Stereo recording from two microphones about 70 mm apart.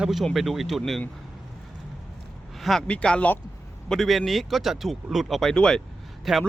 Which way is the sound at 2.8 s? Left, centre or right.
Centre.